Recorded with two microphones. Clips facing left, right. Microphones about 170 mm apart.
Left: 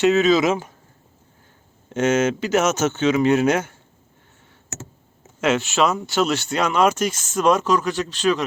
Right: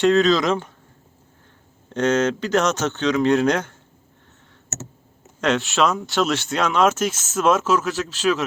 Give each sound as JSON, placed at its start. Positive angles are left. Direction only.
{"t": 0.0, "sound": "speech", "side_deg": 5}
{"t": 1.9, "sound": "speech", "side_deg": 5}
{"t": 5.4, "sound": "speech", "side_deg": 0}